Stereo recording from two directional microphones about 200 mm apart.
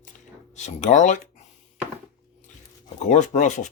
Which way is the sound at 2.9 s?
35° left (ahead or behind).